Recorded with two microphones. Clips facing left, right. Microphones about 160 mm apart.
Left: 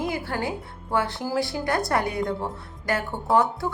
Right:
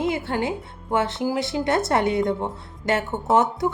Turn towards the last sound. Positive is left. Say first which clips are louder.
# right 2 dB
turn(degrees=-20)  # may be behind; listen again after turning